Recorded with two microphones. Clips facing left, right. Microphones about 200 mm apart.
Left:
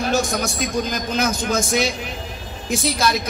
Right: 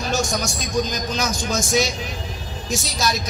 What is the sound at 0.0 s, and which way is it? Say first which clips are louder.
A woman's voice: left 3 dB; 55° left (ahead or behind).